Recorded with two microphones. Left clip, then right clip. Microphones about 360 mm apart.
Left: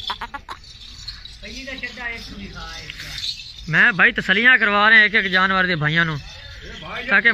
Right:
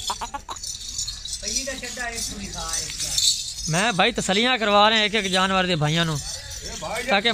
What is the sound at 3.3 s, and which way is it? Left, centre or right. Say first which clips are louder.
Speech: left 2 dB; centre.